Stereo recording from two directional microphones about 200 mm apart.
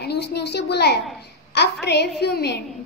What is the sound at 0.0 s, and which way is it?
A woman's voice, 55° left (ahead or behind).